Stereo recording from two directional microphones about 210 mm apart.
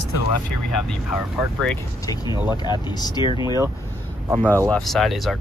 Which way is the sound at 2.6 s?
20° left (ahead or behind).